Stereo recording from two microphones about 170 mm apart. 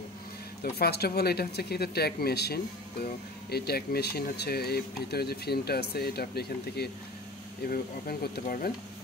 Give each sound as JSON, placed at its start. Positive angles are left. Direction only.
{"t": 0.6, "sound": "speech", "side_deg": 70}